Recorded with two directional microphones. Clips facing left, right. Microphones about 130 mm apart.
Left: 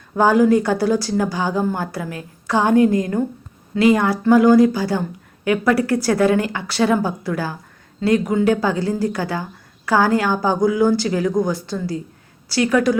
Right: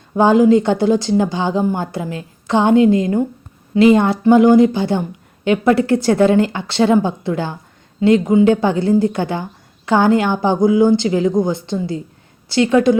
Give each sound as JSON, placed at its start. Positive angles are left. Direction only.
{"t": 0.1, "sound": "a woman's voice", "side_deg": -20}